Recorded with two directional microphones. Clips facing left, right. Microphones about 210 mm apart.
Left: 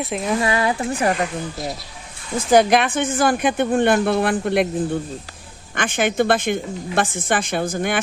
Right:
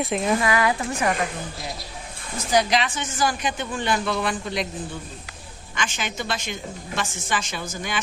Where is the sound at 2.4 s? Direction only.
55° left (ahead or behind).